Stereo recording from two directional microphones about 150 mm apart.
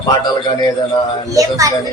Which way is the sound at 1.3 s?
20° right (ahead or behind).